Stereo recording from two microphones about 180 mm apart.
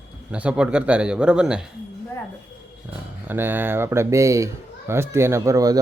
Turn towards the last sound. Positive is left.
turn(degrees=-20)  # may be behind; listen again after turning